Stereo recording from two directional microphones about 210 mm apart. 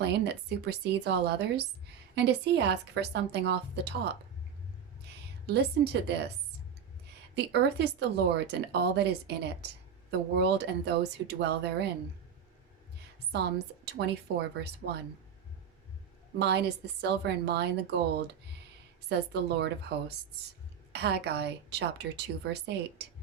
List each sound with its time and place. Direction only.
0.0 s speech: 55° right (ahead or behind)
5.5 s speech: 50° right (ahead or behind)
7.3 s speech: 50° right (ahead or behind)
13.3 s speech: 50° right (ahead or behind)
16.4 s speech: 50° right (ahead or behind)
19.0 s speech: 50° right (ahead or behind)